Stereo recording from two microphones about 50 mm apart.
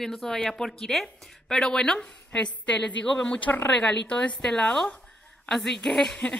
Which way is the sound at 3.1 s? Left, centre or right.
Left.